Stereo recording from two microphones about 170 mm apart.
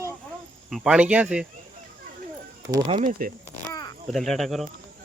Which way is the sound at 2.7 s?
30° right (ahead or behind).